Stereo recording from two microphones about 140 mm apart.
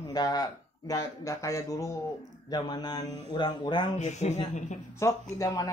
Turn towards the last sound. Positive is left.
turn(degrees=25)  # may be behind; listen again after turning